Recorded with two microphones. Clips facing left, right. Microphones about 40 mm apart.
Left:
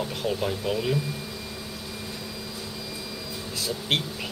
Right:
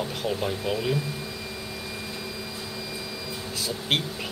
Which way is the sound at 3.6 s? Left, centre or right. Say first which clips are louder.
Even; centre.